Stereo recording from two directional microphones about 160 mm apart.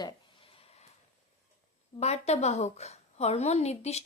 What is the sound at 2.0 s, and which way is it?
A woman's voice, 40° left (ahead or behind).